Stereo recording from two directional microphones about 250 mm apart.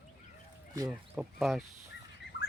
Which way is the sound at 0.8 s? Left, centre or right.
Centre.